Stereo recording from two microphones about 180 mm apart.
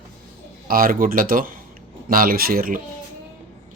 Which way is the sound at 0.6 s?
55° right (ahead or behind).